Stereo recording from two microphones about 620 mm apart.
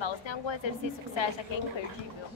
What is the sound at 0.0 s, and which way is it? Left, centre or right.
Speech, left.